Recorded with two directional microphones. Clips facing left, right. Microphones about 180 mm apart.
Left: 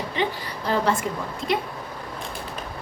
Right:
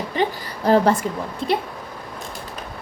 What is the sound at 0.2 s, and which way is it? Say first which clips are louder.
Speech: right 4 dB; 45° right (ahead or behind).